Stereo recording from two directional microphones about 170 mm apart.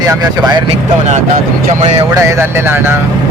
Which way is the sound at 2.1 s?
15° right (ahead or behind).